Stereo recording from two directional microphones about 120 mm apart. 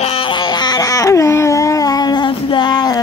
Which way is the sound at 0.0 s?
50° left (ahead or behind).